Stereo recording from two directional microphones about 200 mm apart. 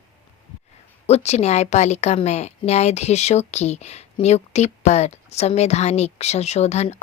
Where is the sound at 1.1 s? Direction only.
35° left (ahead or behind).